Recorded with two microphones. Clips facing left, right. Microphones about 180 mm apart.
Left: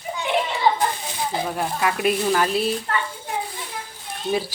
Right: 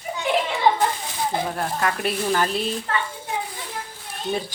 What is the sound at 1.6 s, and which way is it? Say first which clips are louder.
Speech: left 1 dB; 5° left (ahead or behind).